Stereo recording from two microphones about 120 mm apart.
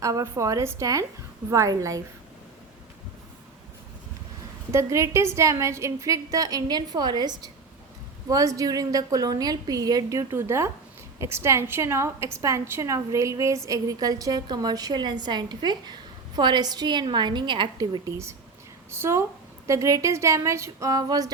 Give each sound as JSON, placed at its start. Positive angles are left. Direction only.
{"t": 0.0, "sound": "a woman's voice", "side_deg": -30}
{"t": 4.7, "sound": "a woman's voice", "side_deg": -25}